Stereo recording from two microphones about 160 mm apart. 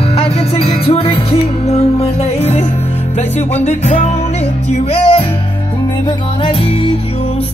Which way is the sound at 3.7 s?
45° left (ahead or behind).